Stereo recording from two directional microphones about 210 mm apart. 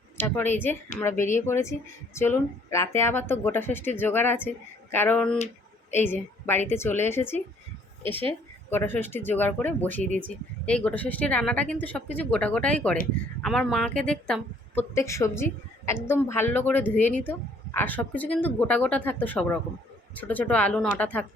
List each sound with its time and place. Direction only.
0.2 s a woman's voice: 10° left (ahead or behind)
8.1 s a woman's voice: 25° right (ahead or behind)
8.7 s a woman's voice: 10° left (ahead or behind)
14.9 s a woman's voice: 15° left (ahead or behind)